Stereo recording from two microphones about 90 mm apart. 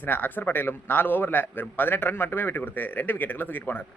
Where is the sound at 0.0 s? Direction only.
20° left (ahead or behind).